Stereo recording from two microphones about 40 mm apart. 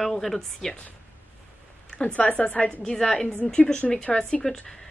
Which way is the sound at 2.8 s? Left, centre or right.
Centre.